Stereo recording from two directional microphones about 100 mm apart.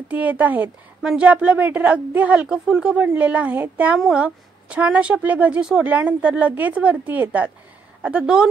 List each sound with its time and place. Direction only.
0.1 s a woman's voice: 15° right (ahead or behind)